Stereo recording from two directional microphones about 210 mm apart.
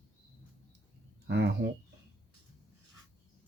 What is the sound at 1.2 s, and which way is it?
Speech, 55° right (ahead or behind).